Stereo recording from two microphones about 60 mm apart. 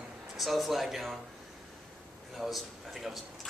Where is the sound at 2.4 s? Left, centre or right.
Centre.